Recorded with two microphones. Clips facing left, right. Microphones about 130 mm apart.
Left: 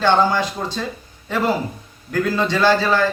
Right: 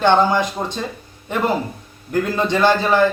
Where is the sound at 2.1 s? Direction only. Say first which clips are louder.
Right 1 dB; 20° right (ahead or behind).